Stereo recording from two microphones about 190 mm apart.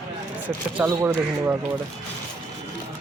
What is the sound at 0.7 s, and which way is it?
Speech, 10° right (ahead or behind).